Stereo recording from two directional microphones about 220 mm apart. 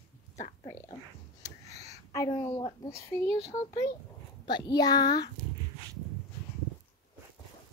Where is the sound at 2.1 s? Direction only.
15° left (ahead or behind).